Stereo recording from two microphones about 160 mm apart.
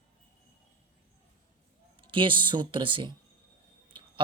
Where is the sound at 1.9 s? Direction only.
30° right (ahead or behind).